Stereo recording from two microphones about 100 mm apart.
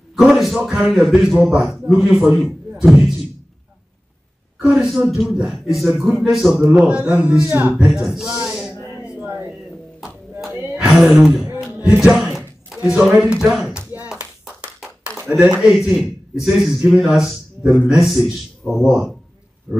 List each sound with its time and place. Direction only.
0.1 s a sound: 5° right (ahead or behind)
0.6 s a man's voice: 10° right (ahead or behind)
4.6 s a man's voice: 10° right (ahead or behind)
7.8 s speech: 5° right (ahead or behind)
8.5 s a sound: 5° right (ahead or behind)
10.6 s a sound: 10° right (ahead or behind)
12.1 s speech: 5° right (ahead or behind)
14.0 s clapping: 5° right (ahead or behind)
15.1 s a man's voice: 10° right (ahead or behind)